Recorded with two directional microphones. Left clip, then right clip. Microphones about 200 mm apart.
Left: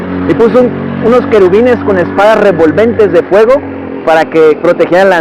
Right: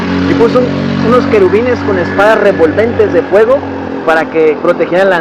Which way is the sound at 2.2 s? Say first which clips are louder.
Left 1 dB; 50° left (ahead or behind).